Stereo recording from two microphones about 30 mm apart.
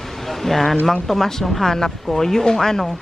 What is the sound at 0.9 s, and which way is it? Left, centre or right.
Speech, centre.